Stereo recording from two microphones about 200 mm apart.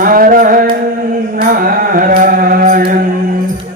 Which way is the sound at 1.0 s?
45° right (ahead or behind).